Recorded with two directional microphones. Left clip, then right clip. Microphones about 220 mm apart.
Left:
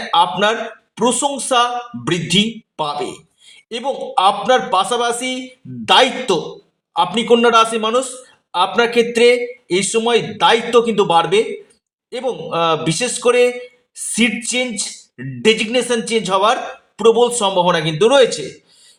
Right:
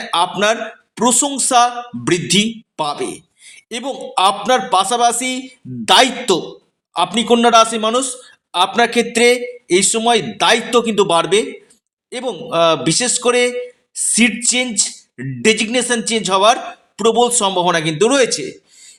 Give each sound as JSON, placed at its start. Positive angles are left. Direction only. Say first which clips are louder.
{"t": 0.1, "sound": "a man's voice", "louder": "left 1 dB", "side_deg": -30}